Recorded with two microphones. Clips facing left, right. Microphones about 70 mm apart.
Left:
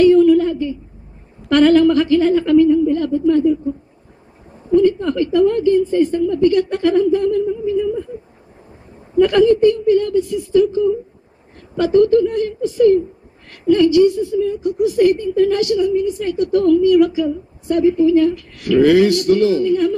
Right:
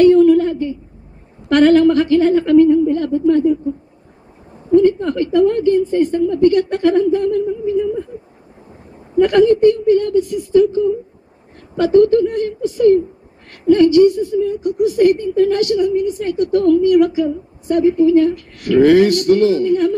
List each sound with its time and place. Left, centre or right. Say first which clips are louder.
0.0 s a sound: right 1 dB; right
1.5 s a woman's voice: right 1 dB; right
4.7 s a woman's voice: right 1 dB; right
9.1 s a woman's voice: right 1 dB; right
10.5 s a woman's voice: right 1 dB; right